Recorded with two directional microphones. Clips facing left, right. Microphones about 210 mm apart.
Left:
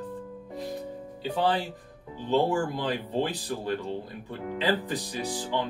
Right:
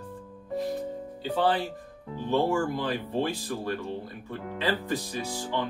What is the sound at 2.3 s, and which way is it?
Speech, 20° left (ahead or behind).